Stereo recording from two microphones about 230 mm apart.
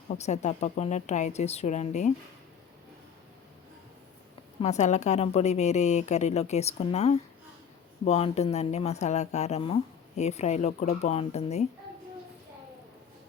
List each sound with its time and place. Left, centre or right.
0.1 s a woman's voice: left
4.6 s speech: left